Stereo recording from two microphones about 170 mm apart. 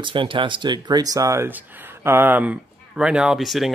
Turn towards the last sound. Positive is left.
turn(degrees=0)  # may be behind; listen again after turning